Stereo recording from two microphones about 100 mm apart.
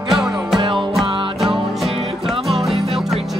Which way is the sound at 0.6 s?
55° right (ahead or behind).